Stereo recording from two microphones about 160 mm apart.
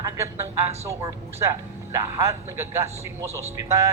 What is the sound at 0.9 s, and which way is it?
A man's voice, 20° right (ahead or behind).